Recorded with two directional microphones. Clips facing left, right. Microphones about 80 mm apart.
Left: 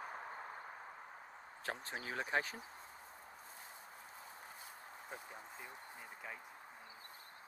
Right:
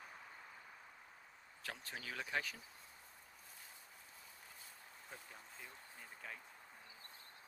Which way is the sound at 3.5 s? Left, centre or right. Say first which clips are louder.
Left 6 dB; left.